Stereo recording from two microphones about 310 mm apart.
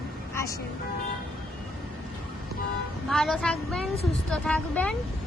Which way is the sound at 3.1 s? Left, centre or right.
Centre.